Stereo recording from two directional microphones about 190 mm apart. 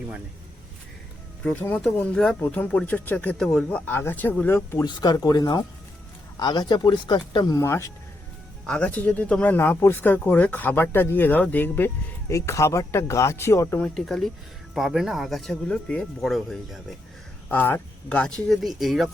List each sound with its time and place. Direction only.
1.5 s speech: 5° left (ahead or behind)